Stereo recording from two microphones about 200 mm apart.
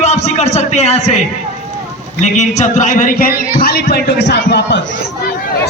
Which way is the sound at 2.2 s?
35° left (ahead or behind).